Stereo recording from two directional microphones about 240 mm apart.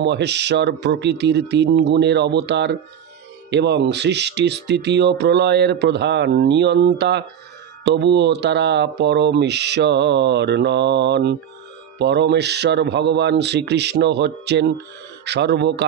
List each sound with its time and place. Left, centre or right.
0.0 s speech: right